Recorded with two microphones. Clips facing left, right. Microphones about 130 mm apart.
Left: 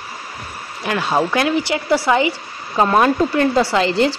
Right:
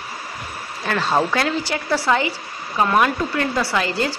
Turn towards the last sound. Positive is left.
turn(degrees=25)  # may be behind; listen again after turning